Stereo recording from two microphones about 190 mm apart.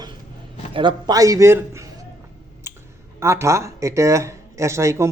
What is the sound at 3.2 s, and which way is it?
Speech, 15° right (ahead or behind).